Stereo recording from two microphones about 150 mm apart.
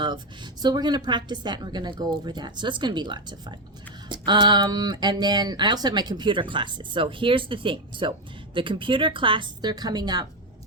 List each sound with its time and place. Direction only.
0.6 s speech: 25° right (ahead or behind)